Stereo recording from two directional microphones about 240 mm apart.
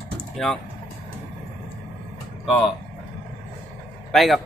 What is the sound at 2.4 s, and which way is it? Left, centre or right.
Speech, centre.